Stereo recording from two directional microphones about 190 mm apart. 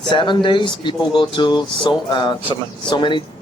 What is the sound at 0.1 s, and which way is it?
Speech, 25° left (ahead or behind).